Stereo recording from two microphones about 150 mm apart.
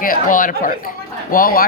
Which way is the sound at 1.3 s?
75° left (ahead or behind).